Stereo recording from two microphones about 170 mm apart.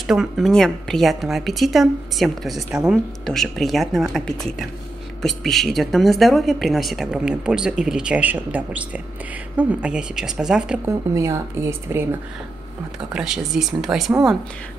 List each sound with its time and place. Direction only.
0.0 s a woman's voice: centre (ahead or behind)
10.9 s speech: 15° right (ahead or behind)
13.1 s a woman's voice: 5° right (ahead or behind)